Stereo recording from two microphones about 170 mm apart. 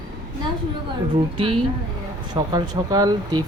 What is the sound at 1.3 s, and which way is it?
Speech, 35° right (ahead or behind).